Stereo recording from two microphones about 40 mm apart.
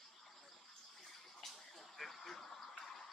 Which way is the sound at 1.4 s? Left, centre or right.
Centre.